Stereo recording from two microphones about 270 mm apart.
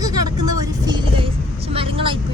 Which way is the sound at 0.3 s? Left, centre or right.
Right.